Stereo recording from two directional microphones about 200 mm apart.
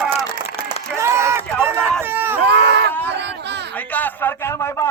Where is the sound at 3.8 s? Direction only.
10° left (ahead or behind).